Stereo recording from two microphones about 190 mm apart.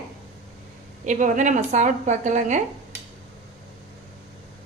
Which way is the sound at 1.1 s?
40° right (ahead or behind).